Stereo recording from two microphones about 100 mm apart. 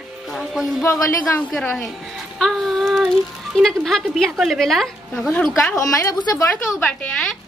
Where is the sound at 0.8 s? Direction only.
25° left (ahead or behind).